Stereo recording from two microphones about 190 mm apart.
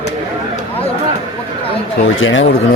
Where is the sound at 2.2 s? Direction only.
90° left.